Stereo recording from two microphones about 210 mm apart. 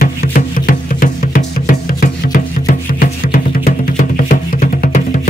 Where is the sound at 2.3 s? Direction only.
45° left (ahead or behind).